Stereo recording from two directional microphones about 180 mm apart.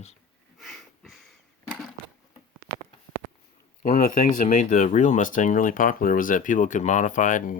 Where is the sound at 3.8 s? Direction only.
50° left (ahead or behind).